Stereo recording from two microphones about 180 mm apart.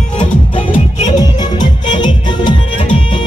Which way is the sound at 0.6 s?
35° left (ahead or behind).